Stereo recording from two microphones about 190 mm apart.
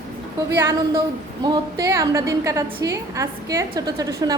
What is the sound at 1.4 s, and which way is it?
A woman's voice, 20° right (ahead or behind).